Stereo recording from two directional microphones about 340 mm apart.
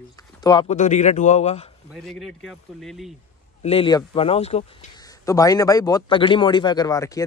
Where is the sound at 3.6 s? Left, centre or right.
Centre.